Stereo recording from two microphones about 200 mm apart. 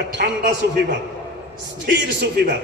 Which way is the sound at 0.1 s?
60° right (ahead or behind).